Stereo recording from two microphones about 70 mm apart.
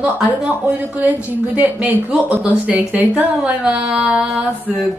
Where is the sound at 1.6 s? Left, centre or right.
Centre.